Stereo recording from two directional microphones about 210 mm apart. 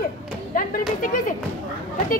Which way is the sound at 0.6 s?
40° left (ahead or behind).